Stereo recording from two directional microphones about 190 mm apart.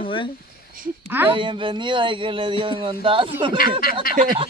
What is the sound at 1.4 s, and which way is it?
Speech, 25° right (ahead or behind).